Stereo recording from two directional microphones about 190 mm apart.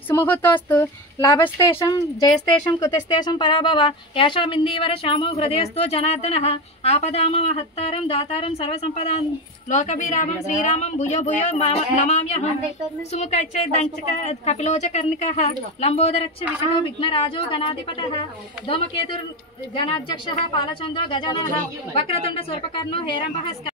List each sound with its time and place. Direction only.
0.1 s a woman's voice: 10° left (ahead or behind); by 17.7 s 30° left (ahead or behind)
19.7 s a woman's voice: 25° left (ahead or behind)